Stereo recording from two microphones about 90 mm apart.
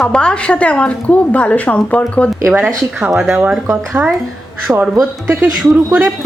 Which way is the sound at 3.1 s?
5° right (ahead or behind).